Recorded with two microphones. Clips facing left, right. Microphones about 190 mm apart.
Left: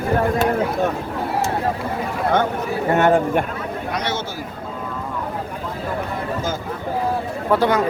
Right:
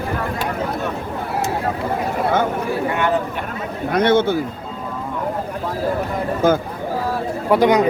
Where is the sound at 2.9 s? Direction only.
45° left (ahead or behind).